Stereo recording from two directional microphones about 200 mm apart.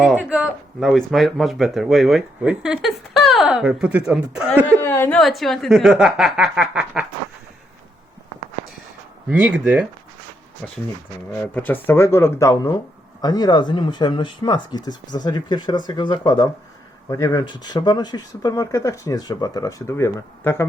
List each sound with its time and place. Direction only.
0.0 s speech: 5° right (ahead or behind)
4.5 s speech: 10° left (ahead or behind)
5.2 s speech: centre (ahead or behind)
9.3 s speech: 5° right (ahead or behind)
10.6 s speech: 5° left (ahead or behind)